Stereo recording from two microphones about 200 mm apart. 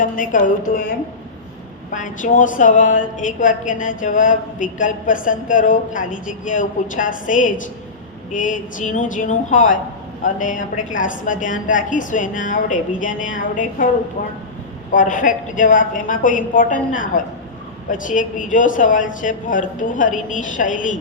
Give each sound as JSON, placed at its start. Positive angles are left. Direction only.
{"t": 0.0, "sound": "a woman's voice", "side_deg": 40}
{"t": 1.9, "sound": "a woman's voice", "side_deg": 40}
{"t": 14.9, "sound": "a woman's voice", "side_deg": 40}